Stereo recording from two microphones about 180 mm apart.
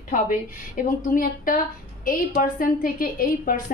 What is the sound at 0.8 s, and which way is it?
A woman's voice, 45° left (ahead or behind).